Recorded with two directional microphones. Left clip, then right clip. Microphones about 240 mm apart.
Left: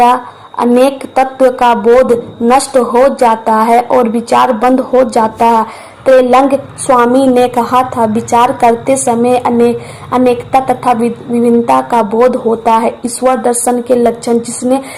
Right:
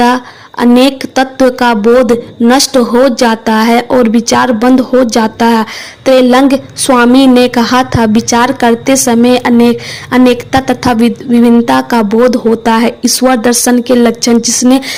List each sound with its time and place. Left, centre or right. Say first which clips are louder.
0.0 s a woman's voice: left 1 dB; right